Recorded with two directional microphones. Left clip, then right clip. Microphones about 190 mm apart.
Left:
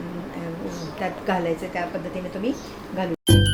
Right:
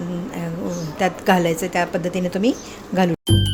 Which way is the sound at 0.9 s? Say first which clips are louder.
Right 8 dB; 60° right (ahead or behind).